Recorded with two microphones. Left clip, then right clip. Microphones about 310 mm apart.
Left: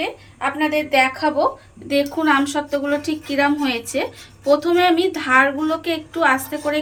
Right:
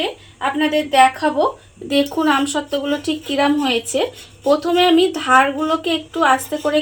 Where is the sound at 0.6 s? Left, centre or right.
Right.